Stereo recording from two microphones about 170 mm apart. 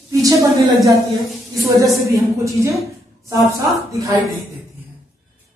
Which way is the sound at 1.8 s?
20° right (ahead or behind).